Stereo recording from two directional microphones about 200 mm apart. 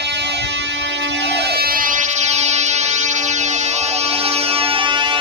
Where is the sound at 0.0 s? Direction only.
60° right (ahead or behind).